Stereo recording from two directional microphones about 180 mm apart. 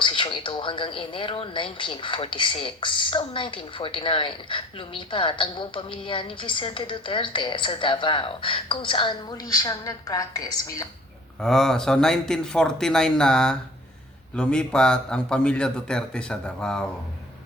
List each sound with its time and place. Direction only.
0.0 s speech: 30° left (ahead or behind)
11.3 s a man's voice: centre (ahead or behind)